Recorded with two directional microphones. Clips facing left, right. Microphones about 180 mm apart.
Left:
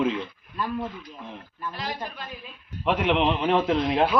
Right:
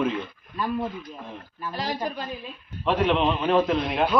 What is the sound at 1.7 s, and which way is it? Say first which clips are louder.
Speech: right 6 dB; 40° right (ahead or behind).